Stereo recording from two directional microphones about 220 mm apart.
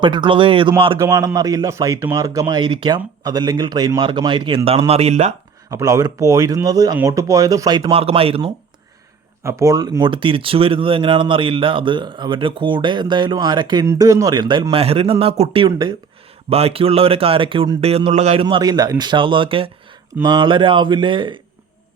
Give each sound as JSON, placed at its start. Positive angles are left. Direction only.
{"t": 0.0, "sound": "speech", "side_deg": -20}
{"t": 5.7, "sound": "speech", "side_deg": -15}
{"t": 9.4, "sound": "speech", "side_deg": -15}